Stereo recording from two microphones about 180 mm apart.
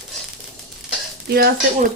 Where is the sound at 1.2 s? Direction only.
60° right (ahead or behind).